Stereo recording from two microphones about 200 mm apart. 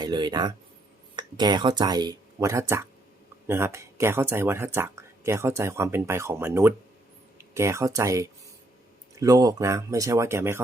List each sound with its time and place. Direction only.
0.0 s speech: 20° right (ahead or behind)